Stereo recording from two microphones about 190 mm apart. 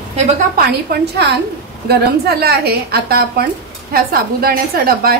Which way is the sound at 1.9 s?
55° right (ahead or behind).